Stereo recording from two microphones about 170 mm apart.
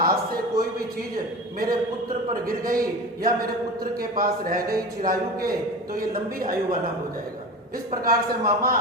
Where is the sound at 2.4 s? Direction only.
55° right (ahead or behind).